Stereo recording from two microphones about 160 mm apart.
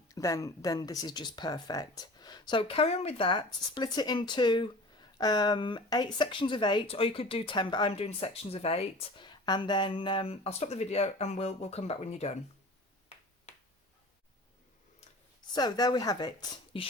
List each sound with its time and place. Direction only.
0.1 s speech: 20° left (ahead or behind); by 12.3 s 40° left (ahead or behind)
13.5 s finger snapping: 45° left (ahead or behind)
15.4 s speech: 25° left (ahead or behind)